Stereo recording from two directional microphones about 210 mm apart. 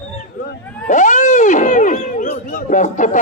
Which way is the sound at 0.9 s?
35° left (ahead or behind).